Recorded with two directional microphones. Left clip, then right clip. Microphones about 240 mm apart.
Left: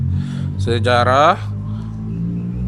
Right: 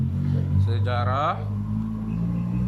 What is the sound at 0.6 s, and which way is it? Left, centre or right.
Speech, left.